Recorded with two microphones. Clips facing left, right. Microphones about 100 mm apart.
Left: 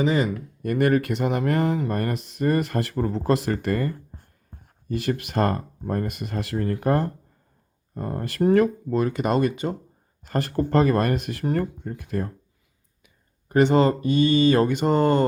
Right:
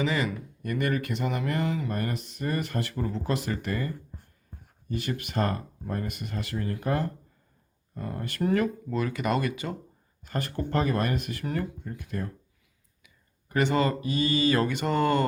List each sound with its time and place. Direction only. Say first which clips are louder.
0.0 s speech: left 6 dB; 40° left (ahead or behind)
0.6 s speech: left 8 dB; 50° left (ahead or behind)
4.9 s speech: left 6 dB; 40° left (ahead or behind)
11.3 s speech: left 6 dB; 35° left (ahead or behind)
13.5 s speech: left 7 dB; 35° left (ahead or behind)
14.3 s a sound: left 5 dB; 30° left (ahead or behind)